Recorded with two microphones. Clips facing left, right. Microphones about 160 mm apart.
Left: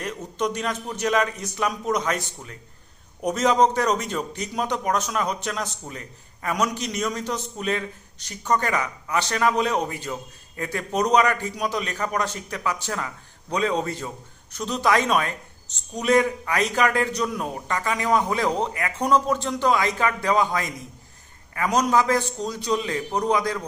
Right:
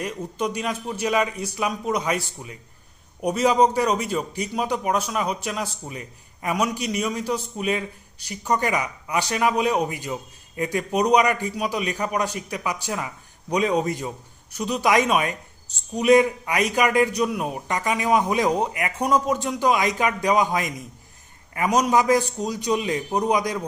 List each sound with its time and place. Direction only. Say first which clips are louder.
0.0 s a man's voice: even; 10° right (ahead or behind)